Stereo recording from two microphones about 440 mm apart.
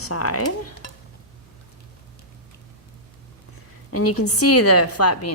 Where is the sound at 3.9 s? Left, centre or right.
Left.